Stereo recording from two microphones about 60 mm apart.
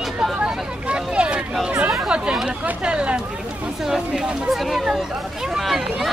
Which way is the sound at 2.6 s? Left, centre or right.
Centre.